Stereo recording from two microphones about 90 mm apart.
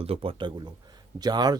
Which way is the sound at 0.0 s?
90° right.